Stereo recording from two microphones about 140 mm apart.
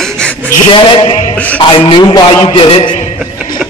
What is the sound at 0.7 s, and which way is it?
Speech, 40° left (ahead or behind).